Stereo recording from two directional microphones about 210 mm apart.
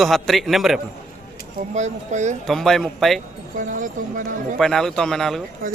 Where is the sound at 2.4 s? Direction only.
Centre (ahead or behind).